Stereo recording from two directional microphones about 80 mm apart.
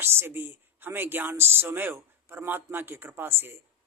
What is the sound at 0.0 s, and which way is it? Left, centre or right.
A man's voice, right.